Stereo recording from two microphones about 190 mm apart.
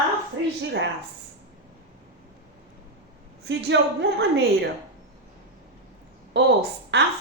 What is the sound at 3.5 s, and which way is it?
A woman's voice, 70° right (ahead or behind).